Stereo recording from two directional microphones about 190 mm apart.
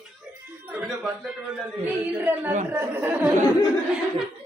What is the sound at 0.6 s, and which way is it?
Speech, 5° right (ahead or behind).